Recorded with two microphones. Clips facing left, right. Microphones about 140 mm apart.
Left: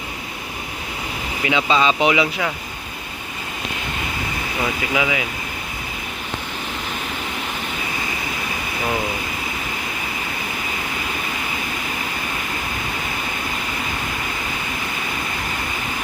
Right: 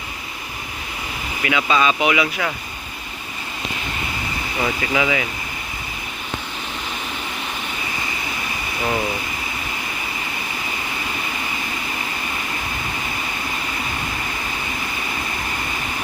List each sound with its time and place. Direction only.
1.5 s speech: 25° left (ahead or behind)
4.6 s speech: 5° left (ahead or behind)